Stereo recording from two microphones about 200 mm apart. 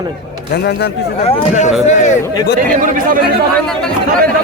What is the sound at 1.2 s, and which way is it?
Speech, 35° left (ahead or behind).